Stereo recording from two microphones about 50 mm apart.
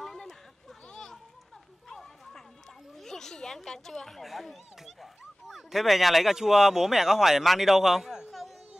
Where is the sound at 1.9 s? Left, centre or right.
Centre.